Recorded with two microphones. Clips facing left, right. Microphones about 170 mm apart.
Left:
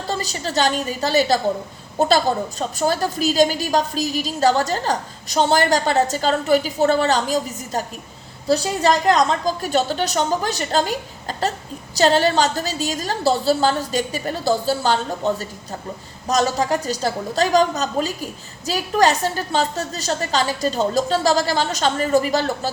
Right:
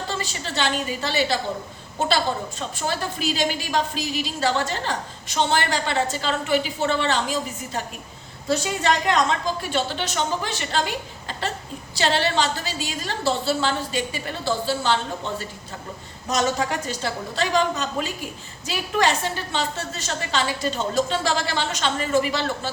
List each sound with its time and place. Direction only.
0.1 s a woman's voice: 40° left (ahead or behind)